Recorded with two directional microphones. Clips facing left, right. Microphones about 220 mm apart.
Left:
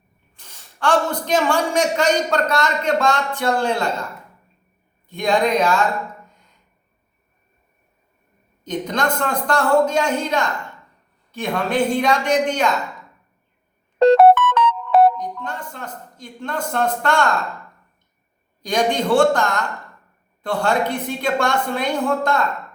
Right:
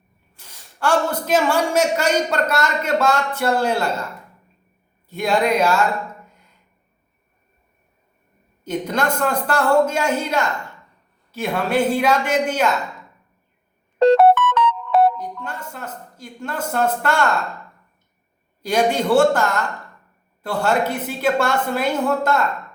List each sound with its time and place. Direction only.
0.3 s a man's voice: 5° right (ahead or behind)
5.0 s a man's voice: 5° right (ahead or behind)
8.6 s a man's voice: 10° right (ahead or behind)
14.2 s music: 25° left (ahead or behind)
15.2 s a man's voice: 5° right (ahead or behind)
18.6 s a man's voice: 5° right (ahead or behind)